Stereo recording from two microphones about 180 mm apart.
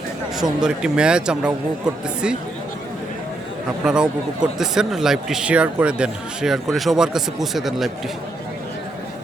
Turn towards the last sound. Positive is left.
turn(degrees=0)  # may be behind; listen again after turning